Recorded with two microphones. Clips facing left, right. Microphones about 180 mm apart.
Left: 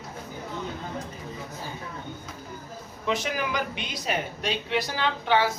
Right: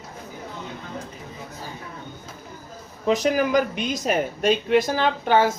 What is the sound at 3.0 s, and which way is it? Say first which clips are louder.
A woman's voice: right 8 dB; 40° right (ahead or behind).